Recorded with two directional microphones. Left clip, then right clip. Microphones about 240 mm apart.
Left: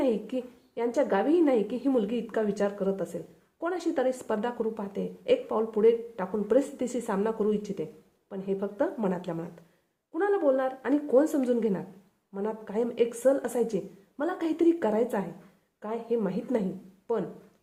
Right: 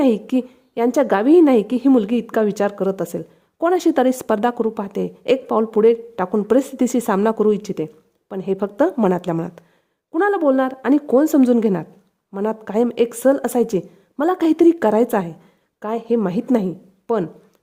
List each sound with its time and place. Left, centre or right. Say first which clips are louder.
0.0 s a woman's voice: right 10 dB; right